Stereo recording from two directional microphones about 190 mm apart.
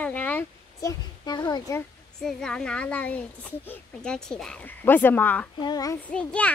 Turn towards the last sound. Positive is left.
turn(degrees=5)  # may be behind; listen again after turning